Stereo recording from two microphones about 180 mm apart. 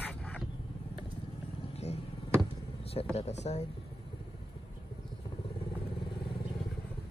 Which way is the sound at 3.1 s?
35° left (ahead or behind).